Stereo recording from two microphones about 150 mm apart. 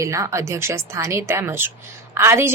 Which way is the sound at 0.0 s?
20° right (ahead or behind).